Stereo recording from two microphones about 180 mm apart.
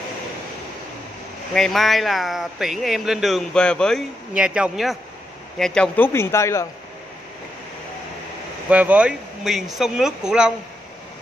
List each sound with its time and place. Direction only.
1.5 s speech: centre (ahead or behind)
5.6 s a man's voice: 10° left (ahead or behind)
8.6 s speech: 10° right (ahead or behind)